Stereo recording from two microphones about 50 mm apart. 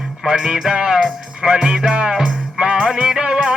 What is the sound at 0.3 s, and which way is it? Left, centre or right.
Music, centre.